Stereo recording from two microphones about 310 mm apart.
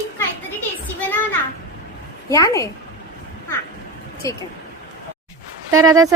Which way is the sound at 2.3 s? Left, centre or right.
Centre.